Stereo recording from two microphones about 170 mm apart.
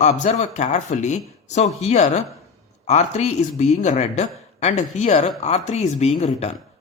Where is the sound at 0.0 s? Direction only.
45° left (ahead or behind).